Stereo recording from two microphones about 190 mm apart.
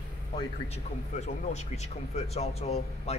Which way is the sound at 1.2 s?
35° left (ahead or behind).